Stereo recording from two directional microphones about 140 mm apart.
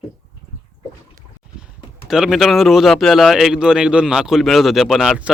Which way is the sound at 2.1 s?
Centre (ahead or behind).